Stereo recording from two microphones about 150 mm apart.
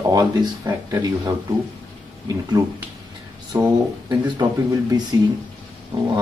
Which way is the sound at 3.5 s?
25° right (ahead or behind).